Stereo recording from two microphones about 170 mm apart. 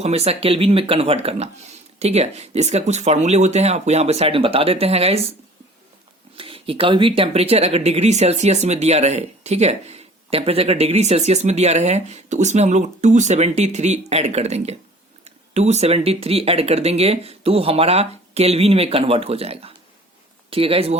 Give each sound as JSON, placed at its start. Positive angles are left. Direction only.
{"t": 0.0, "sound": "speech", "side_deg": -35}
{"t": 6.3, "sound": "speech", "side_deg": -30}